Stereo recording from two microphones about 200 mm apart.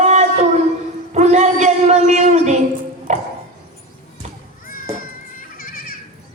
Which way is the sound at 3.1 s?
35° right (ahead or behind).